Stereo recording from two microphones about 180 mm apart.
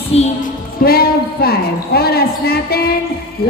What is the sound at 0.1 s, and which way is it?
Speech, 35° left (ahead or behind).